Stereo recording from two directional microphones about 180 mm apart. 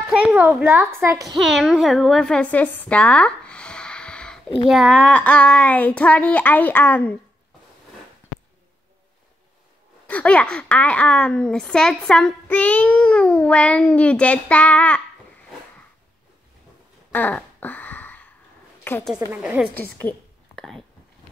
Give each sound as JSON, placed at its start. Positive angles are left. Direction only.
{"t": 0.1, "sound": "a child's voice", "side_deg": -10}
{"t": 1.3, "sound": "a woman's voice", "side_deg": 0}
{"t": 10.0, "sound": "a child's voice", "side_deg": 5}
{"t": 17.1, "sound": "a sound", "side_deg": 10}
{"t": 18.9, "sound": "a child's voice", "side_deg": 10}
{"t": 19.1, "sound": "a child's voice", "side_deg": -15}
{"t": 19.7, "sound": "a woman's voice", "side_deg": 10}